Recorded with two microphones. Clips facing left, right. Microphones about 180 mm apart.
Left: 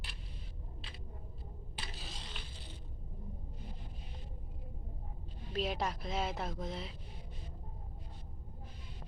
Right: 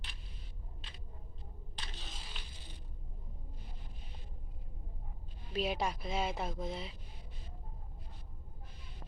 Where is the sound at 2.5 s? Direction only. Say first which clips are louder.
Left 3 dB; 15° right (ahead or behind).